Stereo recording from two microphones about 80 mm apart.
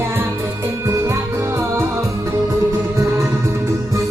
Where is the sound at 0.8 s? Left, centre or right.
Right.